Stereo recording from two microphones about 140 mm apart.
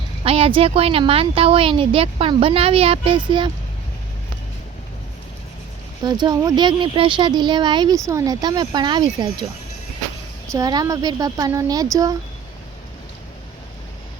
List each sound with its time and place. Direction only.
0.3 s speech: 40° right (ahead or behind)
6.0 s speech: 30° right (ahead or behind)
10.5 s a woman's voice: 25° right (ahead or behind)